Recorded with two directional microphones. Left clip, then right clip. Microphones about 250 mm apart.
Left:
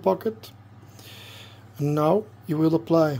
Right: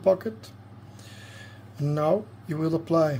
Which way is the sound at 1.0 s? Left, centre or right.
Left.